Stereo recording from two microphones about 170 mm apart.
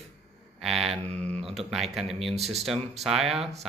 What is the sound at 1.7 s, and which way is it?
Speech, centre (ahead or behind).